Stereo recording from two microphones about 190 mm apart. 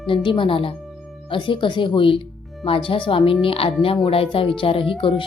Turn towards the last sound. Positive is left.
turn(degrees=30)  # may be behind; listen again after turning